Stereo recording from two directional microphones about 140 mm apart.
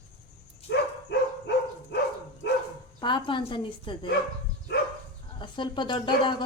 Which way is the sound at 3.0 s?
35° left (ahead or behind).